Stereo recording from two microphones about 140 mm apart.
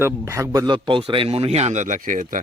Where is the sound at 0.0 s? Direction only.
20° right (ahead or behind).